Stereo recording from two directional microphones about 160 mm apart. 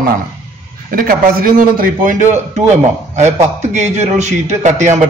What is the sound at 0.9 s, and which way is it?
A man's voice, 65° right (ahead or behind).